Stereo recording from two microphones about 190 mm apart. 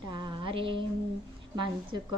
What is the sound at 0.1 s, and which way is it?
Music, 25° right (ahead or behind).